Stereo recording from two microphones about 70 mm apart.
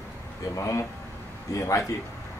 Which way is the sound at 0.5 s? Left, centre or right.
Left.